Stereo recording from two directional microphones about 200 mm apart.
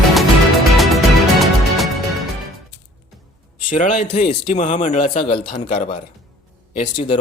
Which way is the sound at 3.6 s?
40° left (ahead or behind).